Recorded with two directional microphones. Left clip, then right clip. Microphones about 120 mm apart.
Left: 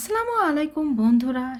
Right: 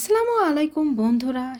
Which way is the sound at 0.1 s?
25° right (ahead or behind).